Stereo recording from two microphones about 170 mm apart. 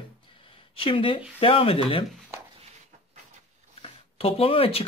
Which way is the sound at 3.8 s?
35° left (ahead or behind).